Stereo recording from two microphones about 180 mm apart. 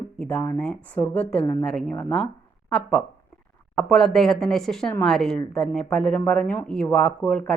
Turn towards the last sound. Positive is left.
turn(degrees=5)  # may be behind; listen again after turning